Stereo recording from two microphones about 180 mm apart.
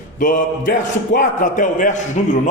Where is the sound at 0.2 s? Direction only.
50° left (ahead or behind).